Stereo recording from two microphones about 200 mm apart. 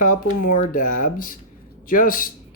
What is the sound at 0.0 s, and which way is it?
Speech, 40° left (ahead or behind).